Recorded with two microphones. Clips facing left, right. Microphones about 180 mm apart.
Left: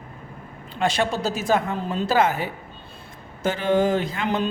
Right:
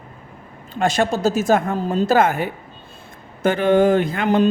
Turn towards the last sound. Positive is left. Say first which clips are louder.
# right 7 dB
turn(degrees=-45)  # may be behind; listen again after turning